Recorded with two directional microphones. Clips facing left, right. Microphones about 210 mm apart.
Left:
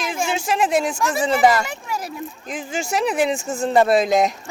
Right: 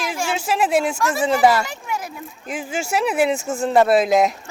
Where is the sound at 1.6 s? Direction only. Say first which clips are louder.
Even; 30° left (ahead or behind).